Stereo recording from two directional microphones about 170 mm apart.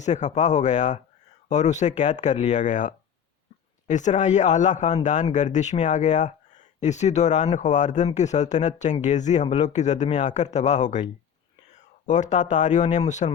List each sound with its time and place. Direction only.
0.0 s speech: 45° left (ahead or behind)